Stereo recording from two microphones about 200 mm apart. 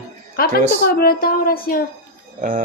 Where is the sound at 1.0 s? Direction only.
50° left (ahead or behind).